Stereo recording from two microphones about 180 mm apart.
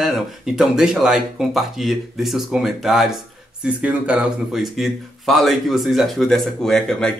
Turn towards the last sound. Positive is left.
turn(degrees=5)  # may be behind; listen again after turning